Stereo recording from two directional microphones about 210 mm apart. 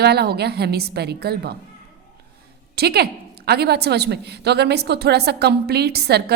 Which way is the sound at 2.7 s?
50° right (ahead or behind).